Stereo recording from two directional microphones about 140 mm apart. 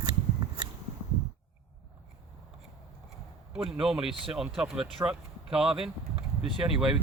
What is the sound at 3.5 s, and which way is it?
Speech, 5° right (ahead or behind).